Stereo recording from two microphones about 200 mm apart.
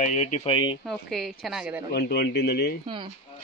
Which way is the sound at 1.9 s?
55° left (ahead or behind).